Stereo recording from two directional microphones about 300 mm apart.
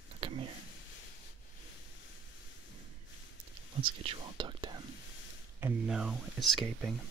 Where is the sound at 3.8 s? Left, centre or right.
Centre.